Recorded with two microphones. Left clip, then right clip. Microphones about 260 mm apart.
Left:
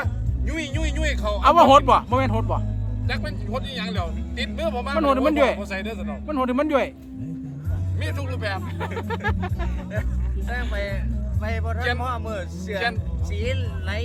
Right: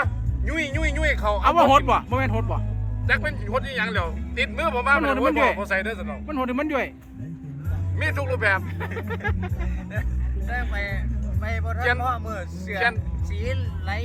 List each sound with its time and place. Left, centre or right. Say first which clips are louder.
0.0 s speech: right 4 dB; centre
7.9 s speech: right 7 dB; centre
9.0 s speech: left 3 dB; centre
10.8 s speech: left 1 dB; centre